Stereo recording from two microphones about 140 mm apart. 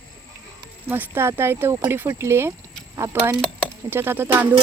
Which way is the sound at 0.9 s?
15° right (ahead or behind).